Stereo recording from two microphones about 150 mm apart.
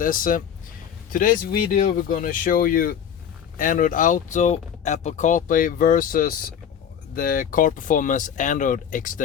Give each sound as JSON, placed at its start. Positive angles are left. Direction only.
{"t": 0.0, "sound": "speech", "side_deg": 65}